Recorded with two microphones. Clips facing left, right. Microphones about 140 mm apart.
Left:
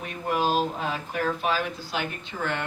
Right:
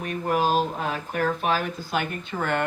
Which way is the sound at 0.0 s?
45° right (ahead or behind).